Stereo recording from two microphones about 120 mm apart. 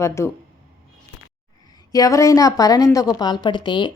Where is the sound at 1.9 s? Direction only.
30° left (ahead or behind).